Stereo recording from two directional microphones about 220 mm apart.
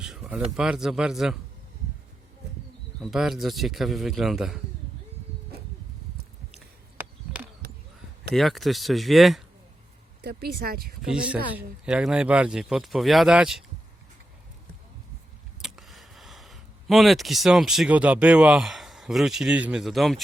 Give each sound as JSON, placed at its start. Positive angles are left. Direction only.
{"t": 0.0, "sound": "speech", "side_deg": -5}
{"t": 3.0, "sound": "speech", "side_deg": 0}
{"t": 6.5, "sound": "a sound", "side_deg": -5}
{"t": 8.3, "sound": "speech", "side_deg": 0}
{"t": 10.2, "sound": "speech", "side_deg": -45}
{"t": 11.0, "sound": "speech", "side_deg": -5}
{"t": 15.6, "sound": "speech", "side_deg": 0}